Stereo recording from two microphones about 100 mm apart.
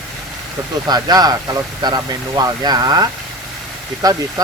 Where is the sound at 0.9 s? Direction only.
40° right (ahead or behind).